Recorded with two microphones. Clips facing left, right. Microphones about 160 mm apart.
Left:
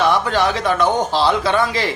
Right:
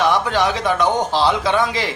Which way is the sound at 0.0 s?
15° right (ahead or behind).